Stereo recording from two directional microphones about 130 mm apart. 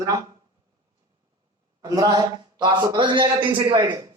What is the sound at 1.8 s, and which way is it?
A man's voice, 30° right (ahead or behind).